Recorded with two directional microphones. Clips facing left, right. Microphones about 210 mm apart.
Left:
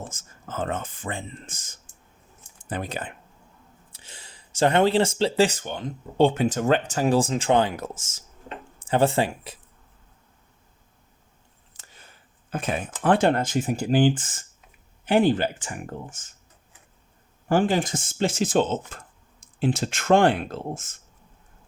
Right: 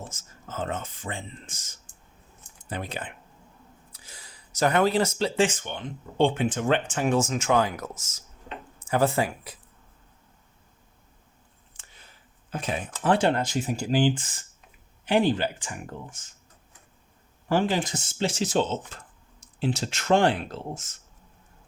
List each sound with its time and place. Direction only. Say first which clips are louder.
0.0 s speech: left 3 dB; 50° left (ahead or behind)
3.9 s speech: left 2 dB; 25° left (ahead or behind)
11.8 s speech: left 3 dB; 45° left (ahead or behind)
17.5 s speech: left 3 dB; 50° left (ahead or behind)